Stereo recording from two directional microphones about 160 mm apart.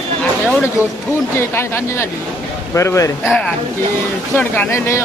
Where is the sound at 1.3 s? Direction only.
15° left (ahead or behind).